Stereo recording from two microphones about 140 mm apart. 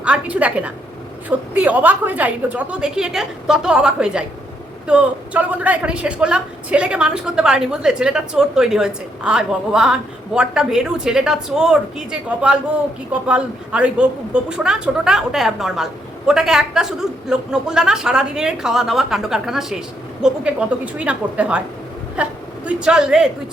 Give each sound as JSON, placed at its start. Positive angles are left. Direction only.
{"t": 0.0, "sound": "a woman's voice", "side_deg": -10}